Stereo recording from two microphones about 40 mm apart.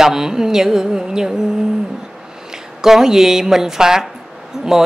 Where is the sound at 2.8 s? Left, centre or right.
Centre.